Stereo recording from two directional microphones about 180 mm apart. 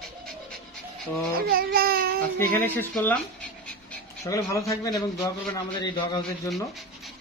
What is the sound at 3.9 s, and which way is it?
A man's voice, 15° left (ahead or behind).